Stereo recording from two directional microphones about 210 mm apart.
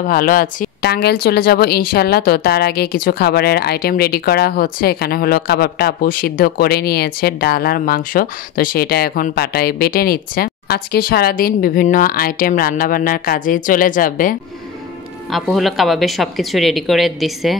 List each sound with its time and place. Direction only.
0.0 s a woman's voice: 40° left (ahead or behind)
15.3 s speech: centre (ahead or behind)